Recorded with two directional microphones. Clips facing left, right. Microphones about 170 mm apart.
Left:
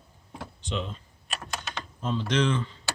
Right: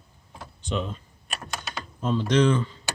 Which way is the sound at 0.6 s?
45° right (ahead or behind).